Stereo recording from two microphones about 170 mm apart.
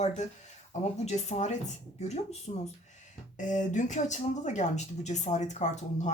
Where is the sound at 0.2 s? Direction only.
45° left (ahead or behind).